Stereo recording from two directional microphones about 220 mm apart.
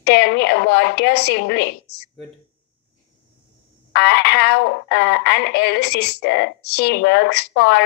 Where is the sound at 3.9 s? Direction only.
50° left (ahead or behind).